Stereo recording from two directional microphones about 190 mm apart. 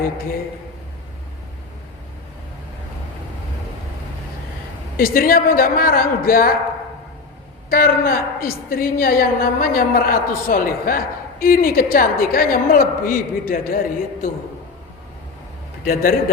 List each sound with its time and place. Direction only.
4.9 s a woman's voice: 50° left (ahead or behind)
7.7 s a woman's voice: 50° left (ahead or behind)
15.8 s a woman's voice: 50° left (ahead or behind)